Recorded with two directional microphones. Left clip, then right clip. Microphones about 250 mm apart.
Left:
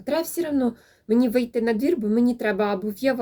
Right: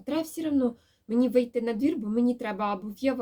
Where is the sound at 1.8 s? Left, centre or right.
Centre.